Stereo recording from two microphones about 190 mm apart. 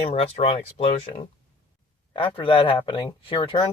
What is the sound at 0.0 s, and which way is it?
Speech, 30° left (ahead or behind).